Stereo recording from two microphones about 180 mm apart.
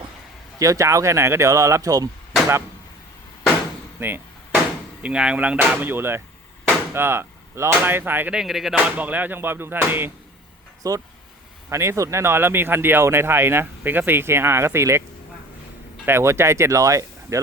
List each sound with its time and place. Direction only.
0.6 s speech: 15° right (ahead or behind)
4.0 s speech: 10° right (ahead or behind)
16.0 s speech: 15° right (ahead or behind)